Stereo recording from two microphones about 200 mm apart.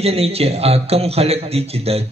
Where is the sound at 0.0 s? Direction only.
30° right (ahead or behind).